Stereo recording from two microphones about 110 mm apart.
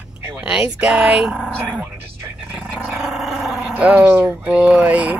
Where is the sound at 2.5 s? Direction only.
5° right (ahead or behind).